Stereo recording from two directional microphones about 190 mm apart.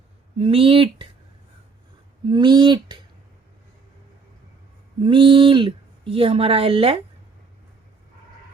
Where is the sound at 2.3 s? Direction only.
25° right (ahead or behind).